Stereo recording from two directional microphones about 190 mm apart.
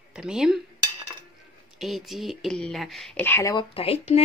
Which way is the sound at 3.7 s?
30° left (ahead or behind).